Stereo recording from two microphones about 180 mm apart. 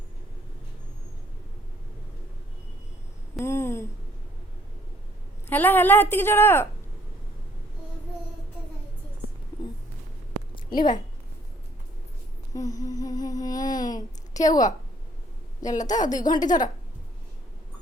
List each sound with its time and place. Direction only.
3.3 s a sound: 15° left (ahead or behind)
5.5 s a woman's voice: 10° left (ahead or behind)
10.5 s a sound: 25° left (ahead or behind)
12.5 s humming: 20° left (ahead or behind)
15.7 s a woman's voice: 45° left (ahead or behind)
16.0 s a woman's voice: 20° left (ahead or behind)